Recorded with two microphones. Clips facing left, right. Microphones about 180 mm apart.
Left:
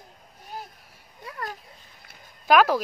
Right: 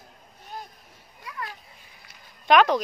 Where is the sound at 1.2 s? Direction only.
40° left (ahead or behind).